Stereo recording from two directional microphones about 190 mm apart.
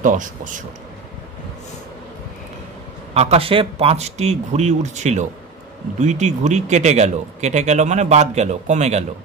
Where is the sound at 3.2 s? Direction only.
30° right (ahead or behind).